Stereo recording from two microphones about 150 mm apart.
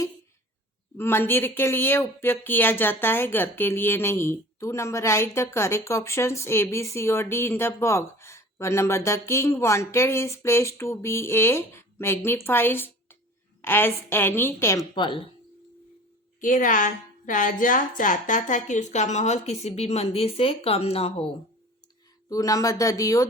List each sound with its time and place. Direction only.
0.9 s a woman's voice: 15° left (ahead or behind)
14.9 s speech: 30° left (ahead or behind)
16.4 s a woman's voice: 60° left (ahead or behind); by 21.2 s 40° left (ahead or behind)
22.3 s speech: 25° left (ahead or behind)